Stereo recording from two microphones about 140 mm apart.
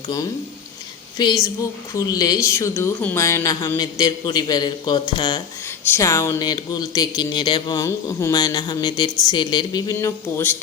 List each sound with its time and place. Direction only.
1.2 s speech: 30° left (ahead or behind)
9.9 s speech: 20° left (ahead or behind)